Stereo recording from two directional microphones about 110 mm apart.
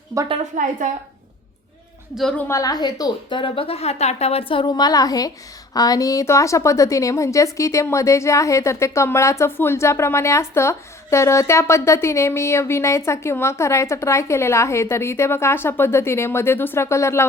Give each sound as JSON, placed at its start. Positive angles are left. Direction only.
{"t": 2.5, "sound": "a woman's voice", "side_deg": 30}